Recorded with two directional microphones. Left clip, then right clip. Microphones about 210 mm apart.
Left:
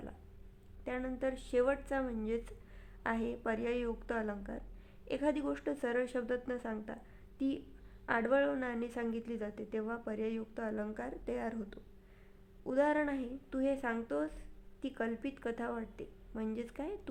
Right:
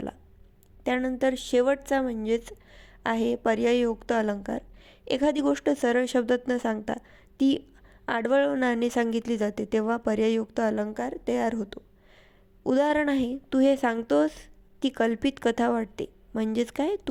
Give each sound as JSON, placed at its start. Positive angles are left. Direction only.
{"t": 0.9, "sound": "a woman's voice", "side_deg": -35}